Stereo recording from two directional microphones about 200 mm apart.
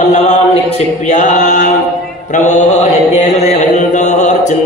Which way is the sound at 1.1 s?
40° left (ahead or behind).